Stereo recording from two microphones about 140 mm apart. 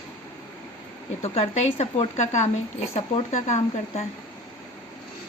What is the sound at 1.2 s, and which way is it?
Speech, 50° left (ahead or behind).